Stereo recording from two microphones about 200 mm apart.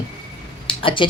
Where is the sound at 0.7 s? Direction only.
25° left (ahead or behind).